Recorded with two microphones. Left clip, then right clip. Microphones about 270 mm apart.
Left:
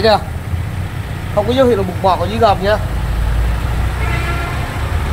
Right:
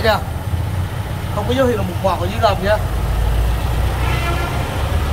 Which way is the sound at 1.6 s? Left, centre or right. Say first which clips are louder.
Left 3 dB; left.